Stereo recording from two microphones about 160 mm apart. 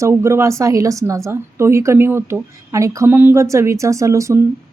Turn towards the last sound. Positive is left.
turn(degrees=-20)  # may be behind; listen again after turning